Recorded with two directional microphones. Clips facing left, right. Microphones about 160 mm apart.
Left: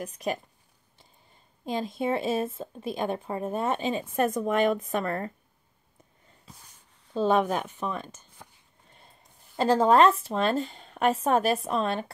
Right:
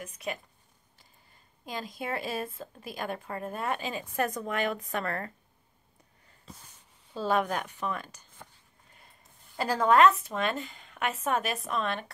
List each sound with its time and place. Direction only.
0.0 s a woman's voice: 35° left (ahead or behind)
1.7 s a woman's voice: 25° left (ahead or behind)
7.2 s a woman's voice: 20° left (ahead or behind)
9.6 s a woman's voice: 25° left (ahead or behind)